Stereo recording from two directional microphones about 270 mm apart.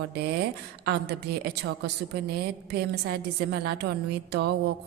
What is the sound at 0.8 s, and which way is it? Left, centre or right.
A woman's voice, right.